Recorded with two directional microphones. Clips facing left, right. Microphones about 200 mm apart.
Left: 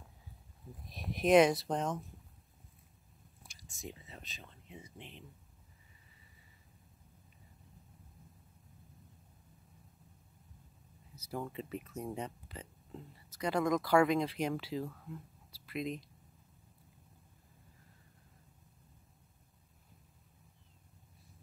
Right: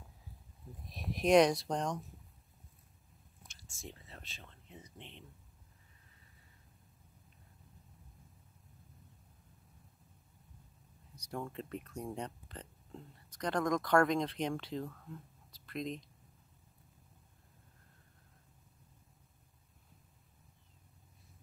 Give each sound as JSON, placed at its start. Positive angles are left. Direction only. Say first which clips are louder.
{"t": 0.7, "sound": "speech", "louder": "right 1 dB", "side_deg": 0}
{"t": 3.4, "sound": "whispering", "louder": "left 1 dB", "side_deg": 15}
{"t": 3.8, "sound": "speech", "louder": "left 3 dB", "side_deg": 0}
{"t": 11.1, "sound": "speech", "louder": "left 1 dB", "side_deg": 5}